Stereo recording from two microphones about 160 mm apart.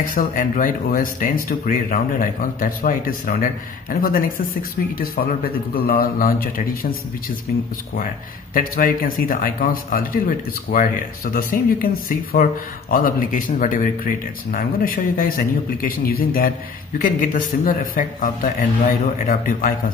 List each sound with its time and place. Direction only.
0.0 s speech: 55° left (ahead or behind)
8.5 s speech: 60° left (ahead or behind)